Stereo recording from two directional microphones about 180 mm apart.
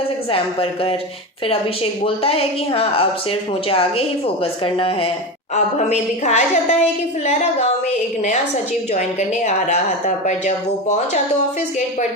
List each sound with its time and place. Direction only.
0.3 s a woman's voice: 30° left (ahead or behind)
8.9 s a woman's voice: 40° left (ahead or behind)